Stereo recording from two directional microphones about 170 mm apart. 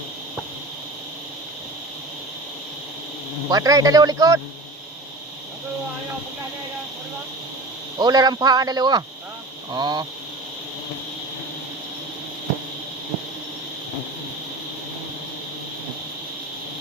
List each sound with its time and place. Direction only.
3.5 s a man's voice: 20° right (ahead or behind)
7.9 s a man's voice: 25° right (ahead or behind)